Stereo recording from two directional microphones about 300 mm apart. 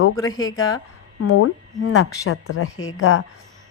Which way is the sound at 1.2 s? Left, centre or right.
Left.